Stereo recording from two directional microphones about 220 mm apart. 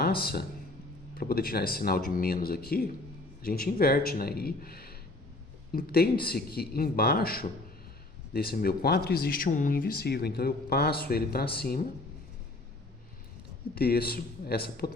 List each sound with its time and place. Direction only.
0.0 s speech: 45° left (ahead or behind)
13.7 s speech: 45° left (ahead or behind)